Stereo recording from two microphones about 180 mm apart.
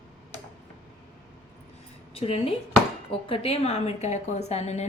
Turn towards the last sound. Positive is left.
turn(degrees=40)  # may be behind; listen again after turning